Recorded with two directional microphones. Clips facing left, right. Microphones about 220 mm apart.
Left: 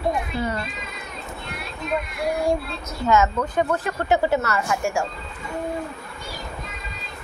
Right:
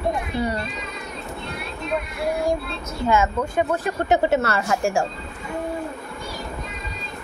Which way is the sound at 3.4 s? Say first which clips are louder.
Even; 10° right (ahead or behind).